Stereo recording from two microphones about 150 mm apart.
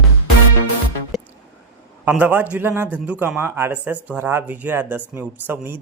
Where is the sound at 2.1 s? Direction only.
10° right (ahead or behind).